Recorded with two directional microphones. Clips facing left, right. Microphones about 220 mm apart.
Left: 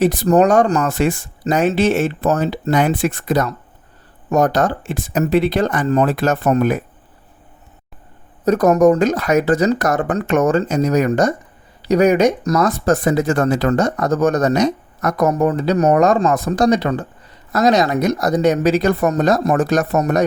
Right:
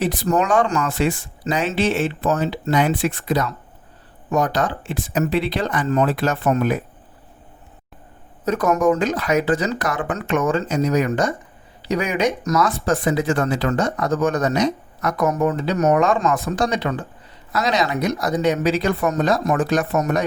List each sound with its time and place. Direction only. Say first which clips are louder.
0.0 s speech: left 7 dB; 45° left (ahead or behind)
8.4 s speech: left 6 dB; 40° left (ahead or behind)